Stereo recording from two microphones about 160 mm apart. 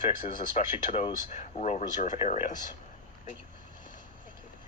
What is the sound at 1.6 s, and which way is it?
Speech, 50° left (ahead or behind).